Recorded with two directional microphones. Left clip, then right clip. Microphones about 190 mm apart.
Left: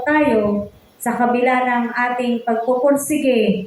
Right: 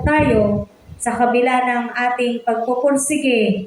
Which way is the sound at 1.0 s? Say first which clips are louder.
Right 1 dB; 20° right (ahead or behind).